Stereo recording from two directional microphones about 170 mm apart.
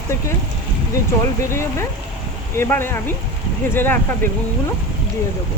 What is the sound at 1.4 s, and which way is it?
Speech, 15° left (ahead or behind).